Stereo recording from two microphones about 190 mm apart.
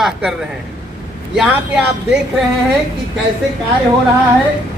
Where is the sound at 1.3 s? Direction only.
Centre (ahead or behind).